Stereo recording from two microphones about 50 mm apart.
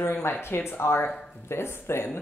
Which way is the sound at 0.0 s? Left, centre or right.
Left.